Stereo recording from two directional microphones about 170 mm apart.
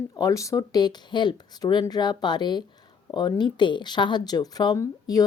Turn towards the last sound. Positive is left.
turn(degrees=20)  # may be behind; listen again after turning